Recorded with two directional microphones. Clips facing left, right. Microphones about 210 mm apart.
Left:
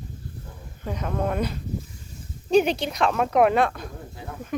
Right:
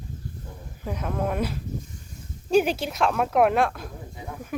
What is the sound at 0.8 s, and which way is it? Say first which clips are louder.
Speech: left 1 dB; centre (ahead or behind).